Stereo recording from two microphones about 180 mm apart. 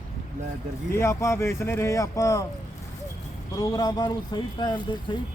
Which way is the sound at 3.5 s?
20° left (ahead or behind).